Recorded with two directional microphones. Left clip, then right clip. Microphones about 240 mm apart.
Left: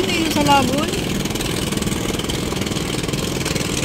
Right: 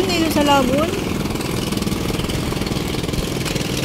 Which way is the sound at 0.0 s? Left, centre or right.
Centre.